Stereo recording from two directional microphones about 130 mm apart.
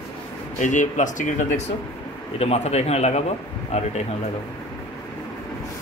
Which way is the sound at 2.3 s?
50° left (ahead or behind).